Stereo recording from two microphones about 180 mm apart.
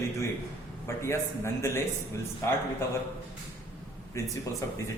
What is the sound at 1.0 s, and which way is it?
Speech, 15° left (ahead or behind).